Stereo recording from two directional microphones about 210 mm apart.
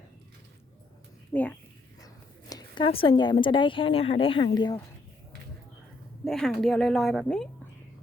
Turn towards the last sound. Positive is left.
turn(degrees=0)  # may be behind; listen again after turning